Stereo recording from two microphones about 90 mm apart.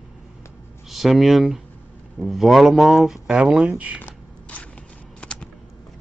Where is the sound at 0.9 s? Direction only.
Centre (ahead or behind).